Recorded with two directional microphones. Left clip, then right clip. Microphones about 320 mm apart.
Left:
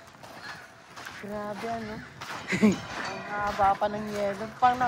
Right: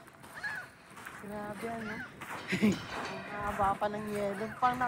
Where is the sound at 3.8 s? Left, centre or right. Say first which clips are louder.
Left 5 dB; left.